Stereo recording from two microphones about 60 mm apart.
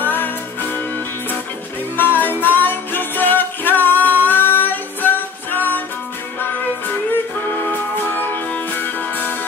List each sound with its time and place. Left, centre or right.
0.0 s music: left
2.0 s music: left
8.3 s music: left